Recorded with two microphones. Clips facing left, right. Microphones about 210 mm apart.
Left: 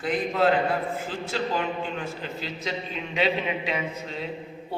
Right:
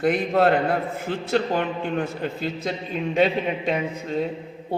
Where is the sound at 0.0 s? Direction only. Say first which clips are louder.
Right 4 dB; 60° right (ahead or behind).